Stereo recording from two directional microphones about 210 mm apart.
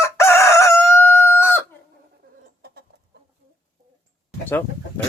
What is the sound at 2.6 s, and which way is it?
Chicken, 50° right (ahead or behind).